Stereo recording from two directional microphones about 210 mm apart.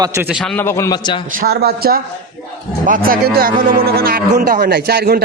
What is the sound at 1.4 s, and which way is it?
Speech, 45° right (ahead or behind).